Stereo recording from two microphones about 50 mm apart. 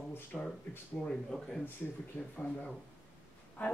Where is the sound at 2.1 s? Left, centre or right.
Left.